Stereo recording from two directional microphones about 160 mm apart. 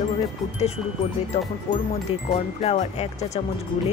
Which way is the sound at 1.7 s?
45° left (ahead or behind).